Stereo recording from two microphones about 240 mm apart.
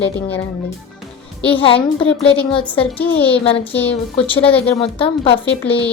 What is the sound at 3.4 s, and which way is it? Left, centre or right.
Speech, left.